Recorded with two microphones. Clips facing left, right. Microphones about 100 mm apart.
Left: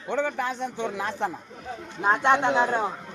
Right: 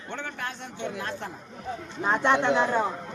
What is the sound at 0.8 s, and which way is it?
Speech, 90° left.